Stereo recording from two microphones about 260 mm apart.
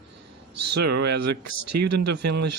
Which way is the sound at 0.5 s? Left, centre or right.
Right.